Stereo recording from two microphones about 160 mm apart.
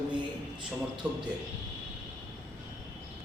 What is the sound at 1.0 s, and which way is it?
Speech, 5° right (ahead or behind).